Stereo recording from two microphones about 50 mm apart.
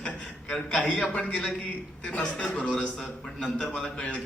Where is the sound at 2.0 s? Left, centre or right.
Left.